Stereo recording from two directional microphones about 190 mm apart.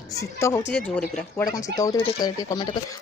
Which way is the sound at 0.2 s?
15° left (ahead or behind).